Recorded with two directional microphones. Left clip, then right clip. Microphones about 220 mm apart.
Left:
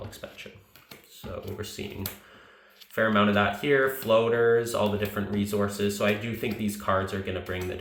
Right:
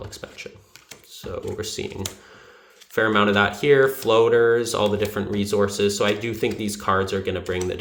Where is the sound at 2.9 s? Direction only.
60° right (ahead or behind).